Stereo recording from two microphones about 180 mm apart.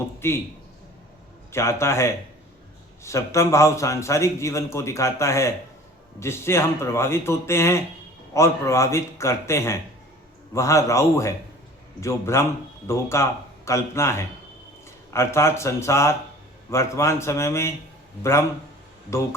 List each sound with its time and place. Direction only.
0.2 s a man's voice: 15° left (ahead or behind)
1.5 s a man's voice: 15° left (ahead or behind)